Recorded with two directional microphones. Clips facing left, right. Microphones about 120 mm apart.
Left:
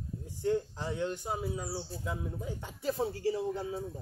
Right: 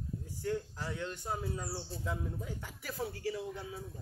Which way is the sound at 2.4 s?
25° left (ahead or behind).